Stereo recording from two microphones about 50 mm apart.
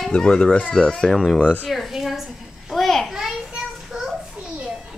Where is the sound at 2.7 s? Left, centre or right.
Centre.